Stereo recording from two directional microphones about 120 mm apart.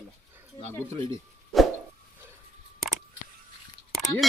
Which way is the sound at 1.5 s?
Centre (ahead or behind).